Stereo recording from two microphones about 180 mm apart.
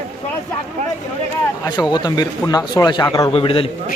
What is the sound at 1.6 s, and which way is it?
A man's voice, 20° left (ahead or behind).